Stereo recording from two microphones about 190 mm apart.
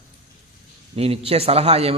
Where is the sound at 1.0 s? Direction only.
30° right (ahead or behind).